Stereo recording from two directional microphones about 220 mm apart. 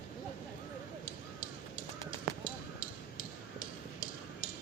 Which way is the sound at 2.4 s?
40° left (ahead or behind).